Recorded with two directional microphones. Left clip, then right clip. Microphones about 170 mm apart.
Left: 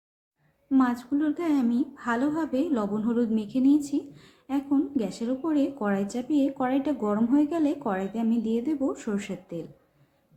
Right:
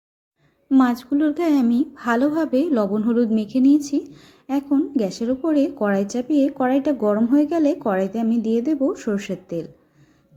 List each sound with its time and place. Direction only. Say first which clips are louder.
0.7 s a woman's voice: right 6 dB; 40° right (ahead or behind)